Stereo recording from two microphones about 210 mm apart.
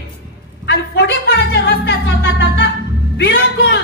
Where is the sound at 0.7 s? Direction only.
55° left (ahead or behind).